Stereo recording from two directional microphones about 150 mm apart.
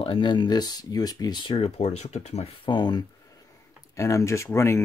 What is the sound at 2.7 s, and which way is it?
Speech, 30° left (ahead or behind).